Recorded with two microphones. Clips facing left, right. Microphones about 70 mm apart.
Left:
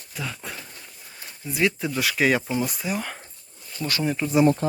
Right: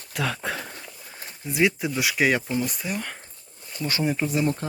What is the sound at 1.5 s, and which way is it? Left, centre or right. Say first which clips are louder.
Speech: right 1 dB; centre.